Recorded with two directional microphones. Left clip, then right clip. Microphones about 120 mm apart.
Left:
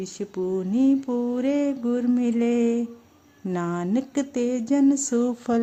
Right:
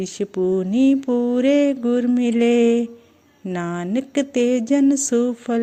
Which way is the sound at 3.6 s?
15° right (ahead or behind).